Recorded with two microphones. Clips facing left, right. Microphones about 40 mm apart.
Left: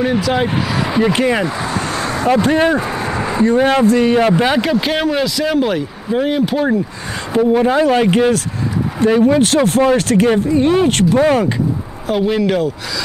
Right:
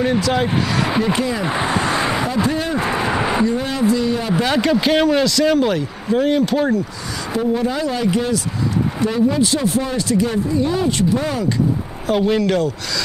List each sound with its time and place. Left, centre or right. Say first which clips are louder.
0.0 s a man's voice: left 2 dB; centre
1.1 s speech: left 5 dB; left
1.4 s speech: even; right
2.0 s a sound: right 1 dB; right
2.4 s speech: left 7 dB; left
2.8 s a sound: right 1 dB; right
3.4 s speech: left 6 dB; left
4.3 s speech: left 4 dB; left
4.6 s a man's voice: even; centre
7.3 s speech: left 7 dB; left
12.1 s a man's voice: left 1 dB; centre